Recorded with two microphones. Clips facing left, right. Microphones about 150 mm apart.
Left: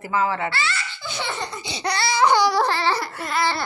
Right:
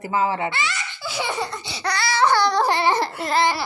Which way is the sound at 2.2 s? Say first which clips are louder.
Left 1 dB; 15° left (ahead or behind).